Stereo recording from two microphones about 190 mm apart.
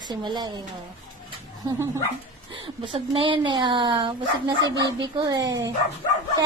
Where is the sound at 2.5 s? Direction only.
25° right (ahead or behind).